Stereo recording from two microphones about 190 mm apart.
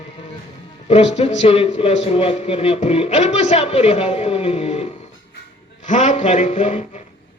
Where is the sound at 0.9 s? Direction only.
35° left (ahead or behind).